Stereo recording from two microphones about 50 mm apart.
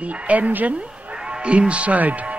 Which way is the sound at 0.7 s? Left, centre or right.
Centre.